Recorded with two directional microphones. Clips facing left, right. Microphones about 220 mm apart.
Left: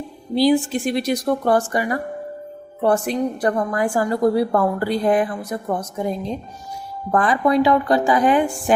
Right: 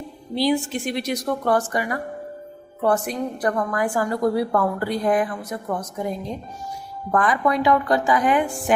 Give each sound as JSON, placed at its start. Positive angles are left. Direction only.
{"t": 0.3, "sound": "a woman's voice", "side_deg": 35}